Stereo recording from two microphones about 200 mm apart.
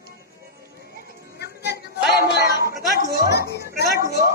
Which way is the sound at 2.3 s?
60° left (ahead or behind).